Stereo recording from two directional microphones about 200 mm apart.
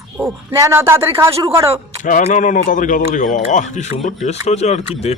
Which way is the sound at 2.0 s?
40° left (ahead or behind).